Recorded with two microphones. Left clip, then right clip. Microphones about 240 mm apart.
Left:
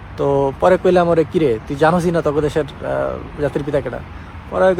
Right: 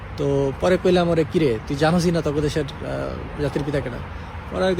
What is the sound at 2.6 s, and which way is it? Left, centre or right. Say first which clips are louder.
Speech: left 6 dB; left.